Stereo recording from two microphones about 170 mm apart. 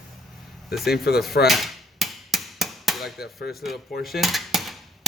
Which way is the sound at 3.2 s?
70° left (ahead or behind).